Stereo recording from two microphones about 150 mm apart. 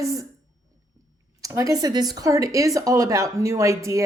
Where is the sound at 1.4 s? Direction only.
20° right (ahead or behind).